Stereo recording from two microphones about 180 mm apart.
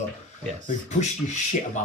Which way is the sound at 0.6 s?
40° left (ahead or behind).